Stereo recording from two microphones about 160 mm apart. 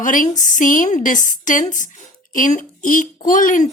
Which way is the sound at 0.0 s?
55° left (ahead or behind).